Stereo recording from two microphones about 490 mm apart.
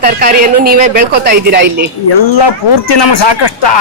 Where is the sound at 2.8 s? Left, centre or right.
Left.